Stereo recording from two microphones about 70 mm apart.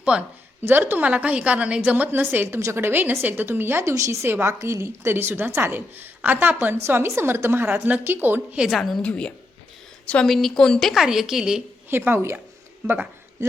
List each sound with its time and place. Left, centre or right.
0.0 s speech: centre
0.6 s a woman's voice: right
2.2 s a woman's voice: right
3.8 s a woman's voice: right
8.7 s a woman's voice: centre
9.0 s a woman's voice: centre
10.2 s a woman's voice: centre
11.0 s a woman's voice: centre
11.9 s a woman's voice: right